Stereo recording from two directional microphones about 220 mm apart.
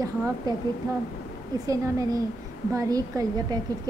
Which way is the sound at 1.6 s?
15° right (ahead or behind).